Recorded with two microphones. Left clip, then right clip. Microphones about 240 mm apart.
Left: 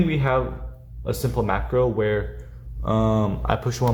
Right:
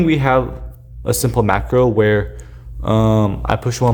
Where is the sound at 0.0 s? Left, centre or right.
Right.